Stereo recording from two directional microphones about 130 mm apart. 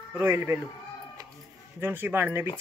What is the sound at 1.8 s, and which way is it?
Speech, 15° right (ahead or behind).